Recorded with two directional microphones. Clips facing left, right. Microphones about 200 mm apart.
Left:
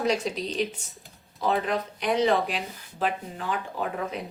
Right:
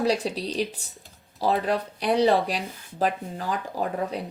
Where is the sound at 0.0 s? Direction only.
35° right (ahead or behind).